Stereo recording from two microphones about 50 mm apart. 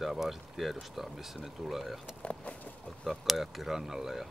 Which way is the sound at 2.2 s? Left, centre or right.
Left.